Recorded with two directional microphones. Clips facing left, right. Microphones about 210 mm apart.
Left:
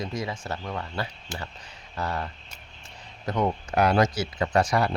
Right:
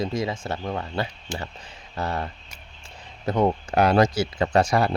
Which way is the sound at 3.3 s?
30° right (ahead or behind).